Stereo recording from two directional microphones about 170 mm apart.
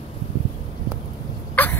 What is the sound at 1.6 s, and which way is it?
Cough, 10° left (ahead or behind).